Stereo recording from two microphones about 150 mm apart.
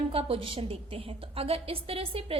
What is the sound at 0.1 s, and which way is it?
A woman's voice, 40° right (ahead or behind).